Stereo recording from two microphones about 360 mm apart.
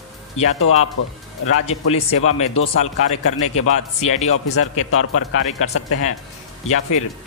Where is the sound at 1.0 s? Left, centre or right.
Left.